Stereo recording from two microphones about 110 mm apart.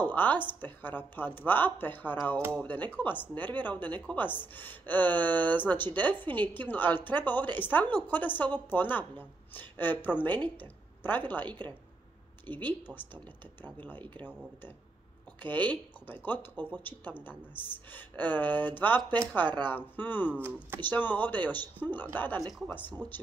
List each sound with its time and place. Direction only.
0.0 s a woman's voice: 15° left (ahead or behind)
15.4 s a woman's voice: 15° left (ahead or behind)
23.0 s speech: 35° right (ahead or behind)